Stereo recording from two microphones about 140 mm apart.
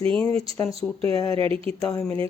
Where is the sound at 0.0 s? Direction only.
40° right (ahead or behind).